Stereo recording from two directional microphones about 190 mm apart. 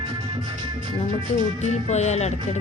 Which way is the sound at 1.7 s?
35° left (ahead or behind).